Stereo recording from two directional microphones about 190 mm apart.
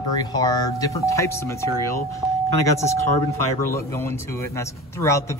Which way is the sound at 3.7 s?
15° left (ahead or behind).